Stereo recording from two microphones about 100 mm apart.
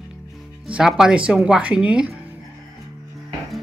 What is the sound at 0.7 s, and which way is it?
Speech, 5° right (ahead or behind).